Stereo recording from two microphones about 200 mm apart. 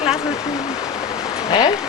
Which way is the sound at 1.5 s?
20° left (ahead or behind).